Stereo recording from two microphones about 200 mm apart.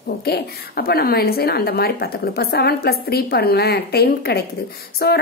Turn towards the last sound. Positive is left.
turn(degrees=50)  # may be behind; listen again after turning